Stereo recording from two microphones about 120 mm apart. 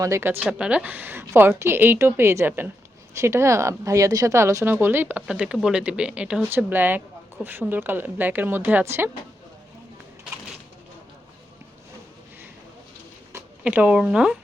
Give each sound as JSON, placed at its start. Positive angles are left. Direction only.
{"t": 0.0, "sound": "a woman's voice", "side_deg": -20}
{"t": 0.6, "sound": "a woman's voice", "side_deg": -10}
{"t": 13.7, "sound": "a woman's voice", "side_deg": -10}